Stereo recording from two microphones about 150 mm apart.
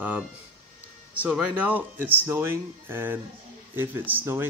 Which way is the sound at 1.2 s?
5° right (ahead or behind).